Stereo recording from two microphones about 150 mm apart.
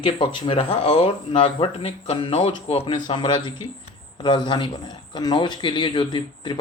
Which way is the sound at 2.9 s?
30° left (ahead or behind).